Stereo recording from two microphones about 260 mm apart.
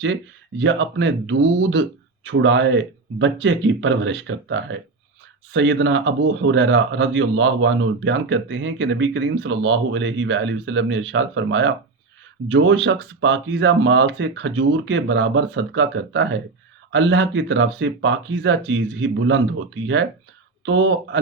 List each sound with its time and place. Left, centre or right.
0.6 s a man's voice: right